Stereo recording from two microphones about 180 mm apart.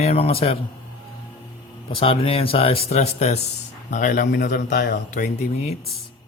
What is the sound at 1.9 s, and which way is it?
Speech, 30° left (ahead or behind).